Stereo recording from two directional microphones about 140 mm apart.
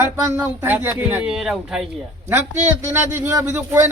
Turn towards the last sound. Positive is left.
turn(degrees=-15)  # may be behind; listen again after turning